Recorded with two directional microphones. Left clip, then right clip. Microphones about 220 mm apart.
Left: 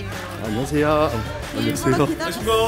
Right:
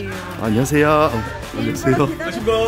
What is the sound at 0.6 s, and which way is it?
Speech, 15° right (ahead or behind).